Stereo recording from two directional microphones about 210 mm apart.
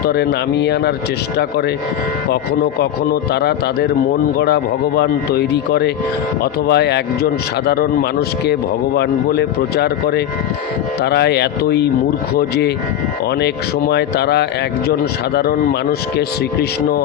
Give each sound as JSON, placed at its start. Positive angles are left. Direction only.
{"t": 0.0, "sound": "speech", "side_deg": 50}
{"t": 3.1, "sound": "speech", "side_deg": 50}
{"t": 9.0, "sound": "speech", "side_deg": 50}
{"t": 13.9, "sound": "speech", "side_deg": 50}